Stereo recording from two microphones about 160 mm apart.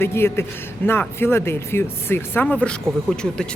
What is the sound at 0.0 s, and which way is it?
Speech, 15° left (ahead or behind).